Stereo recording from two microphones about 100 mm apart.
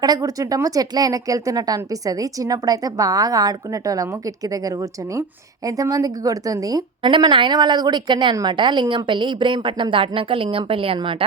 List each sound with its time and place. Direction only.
0.0 s speech: 40° right (ahead or behind)
7.0 s a woman's voice: 55° right (ahead or behind)